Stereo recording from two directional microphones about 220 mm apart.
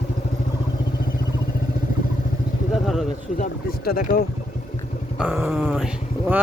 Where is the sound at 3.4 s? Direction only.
40° left (ahead or behind).